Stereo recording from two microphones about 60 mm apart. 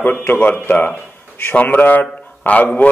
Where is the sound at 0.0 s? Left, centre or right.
Left.